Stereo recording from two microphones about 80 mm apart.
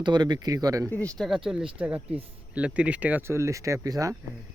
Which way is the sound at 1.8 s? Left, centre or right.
Centre.